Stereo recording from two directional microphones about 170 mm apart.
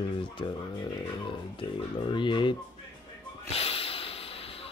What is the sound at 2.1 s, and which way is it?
Speech, 30° left (ahead or behind).